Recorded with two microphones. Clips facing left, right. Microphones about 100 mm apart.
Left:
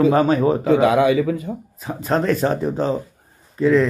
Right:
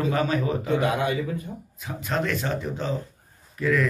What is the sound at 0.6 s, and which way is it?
Speech, 90° left.